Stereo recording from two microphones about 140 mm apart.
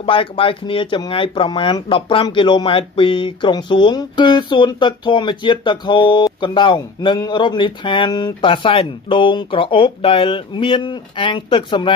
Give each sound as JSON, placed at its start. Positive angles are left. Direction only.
{"t": 0.0, "sound": "speech", "side_deg": 40}